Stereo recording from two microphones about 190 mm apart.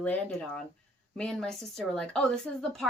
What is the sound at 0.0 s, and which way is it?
A woman's voice, 5° left (ahead or behind).